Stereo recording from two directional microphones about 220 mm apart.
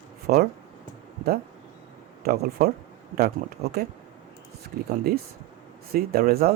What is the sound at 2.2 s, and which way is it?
Speech, 45° right (ahead or behind).